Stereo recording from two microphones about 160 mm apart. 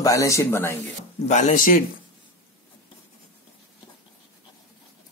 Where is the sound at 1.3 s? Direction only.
50° left (ahead or behind).